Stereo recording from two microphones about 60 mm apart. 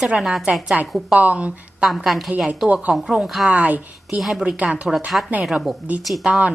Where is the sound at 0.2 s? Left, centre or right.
Centre.